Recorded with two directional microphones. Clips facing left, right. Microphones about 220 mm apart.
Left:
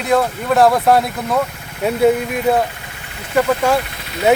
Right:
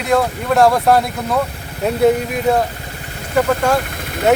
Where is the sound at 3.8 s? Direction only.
50° right (ahead or behind).